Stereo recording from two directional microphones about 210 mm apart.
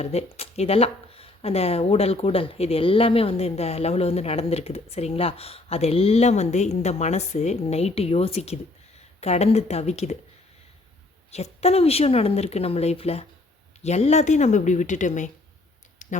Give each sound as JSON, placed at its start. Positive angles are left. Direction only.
{"t": 0.0, "sound": "speech", "side_deg": 30}
{"t": 11.3, "sound": "speech", "side_deg": 30}
{"t": 16.0, "sound": "a sound", "side_deg": 40}